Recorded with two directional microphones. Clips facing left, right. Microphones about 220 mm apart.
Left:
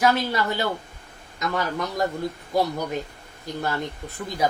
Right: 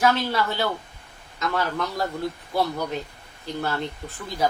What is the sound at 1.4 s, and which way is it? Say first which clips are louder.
A woman's voice: even; 15° left (ahead or behind).